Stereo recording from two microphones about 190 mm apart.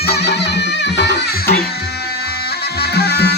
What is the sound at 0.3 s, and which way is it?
Music, 60° left (ahead or behind).